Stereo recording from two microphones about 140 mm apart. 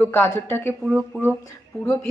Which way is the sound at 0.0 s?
15° left (ahead or behind).